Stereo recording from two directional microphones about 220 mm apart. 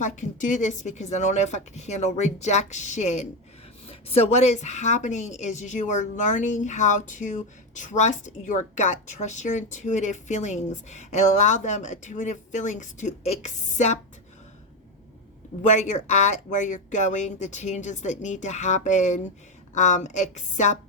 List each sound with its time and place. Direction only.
0.0 s a woman's voice: 35° left (ahead or behind)
15.6 s a woman's voice: 35° left (ahead or behind)